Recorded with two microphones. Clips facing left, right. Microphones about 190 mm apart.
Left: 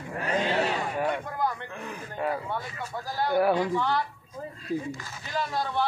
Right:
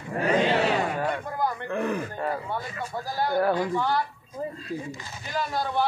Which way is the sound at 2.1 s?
5° left (ahead or behind).